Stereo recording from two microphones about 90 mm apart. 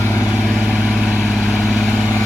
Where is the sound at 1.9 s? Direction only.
25° left (ahead or behind).